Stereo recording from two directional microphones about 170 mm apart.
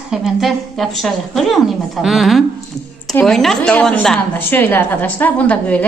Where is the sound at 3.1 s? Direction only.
5° left (ahead or behind).